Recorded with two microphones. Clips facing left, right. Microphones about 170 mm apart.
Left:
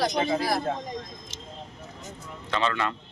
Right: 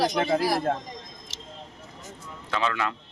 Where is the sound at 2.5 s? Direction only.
5° right (ahead or behind).